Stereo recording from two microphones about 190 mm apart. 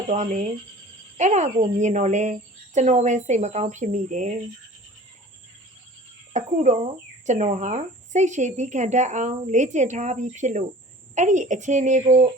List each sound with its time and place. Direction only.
0.1 s speech: 35° right (ahead or behind)
6.3 s speech: 40° right (ahead or behind)